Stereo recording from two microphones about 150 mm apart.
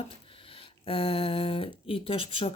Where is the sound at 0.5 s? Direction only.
35° left (ahead or behind).